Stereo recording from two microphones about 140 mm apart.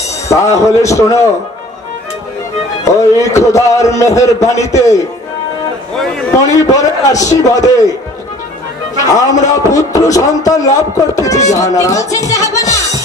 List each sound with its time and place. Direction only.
0.3 s a man's voice: 20° left (ahead or behind)
2.9 s a man's voice: 20° left (ahead or behind)
5.9 s a man's voice: centre (ahead or behind)
6.6 s a man's voice: 25° left (ahead or behind)
8.9 s a man's voice: 25° left (ahead or behind)